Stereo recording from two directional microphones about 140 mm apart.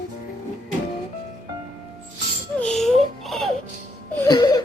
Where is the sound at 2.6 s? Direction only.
5° left (ahead or behind).